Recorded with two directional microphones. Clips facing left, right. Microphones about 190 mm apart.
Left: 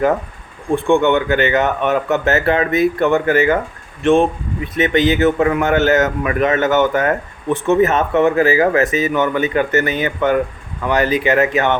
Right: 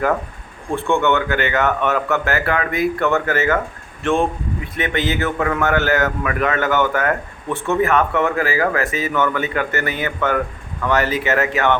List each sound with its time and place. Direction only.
0.8 s a man's voice: 15° left (ahead or behind)